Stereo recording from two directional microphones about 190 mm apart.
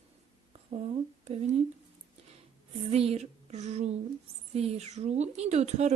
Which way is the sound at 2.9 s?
35° right (ahead or behind).